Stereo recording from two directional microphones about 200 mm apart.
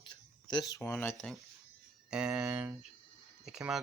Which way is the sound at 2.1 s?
5° right (ahead or behind).